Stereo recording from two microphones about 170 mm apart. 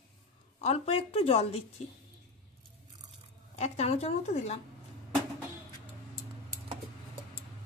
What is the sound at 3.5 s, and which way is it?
A woman's voice, 40° left (ahead or behind).